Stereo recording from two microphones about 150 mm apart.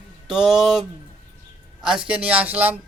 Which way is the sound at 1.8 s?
5° right (ahead or behind).